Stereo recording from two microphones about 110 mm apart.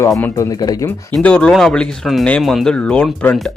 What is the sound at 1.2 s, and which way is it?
Speech, 10° left (ahead or behind).